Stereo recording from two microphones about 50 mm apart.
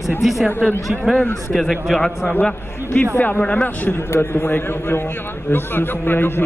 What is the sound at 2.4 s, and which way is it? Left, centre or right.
Speech, left.